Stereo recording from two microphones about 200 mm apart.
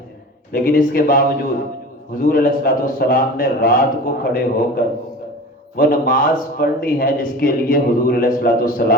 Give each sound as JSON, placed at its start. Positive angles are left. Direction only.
{"t": 0.5, "sound": "a man's voice", "side_deg": 45}